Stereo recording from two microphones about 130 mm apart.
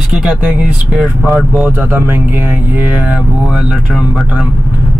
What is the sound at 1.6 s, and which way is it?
Speech, 15° right (ahead or behind).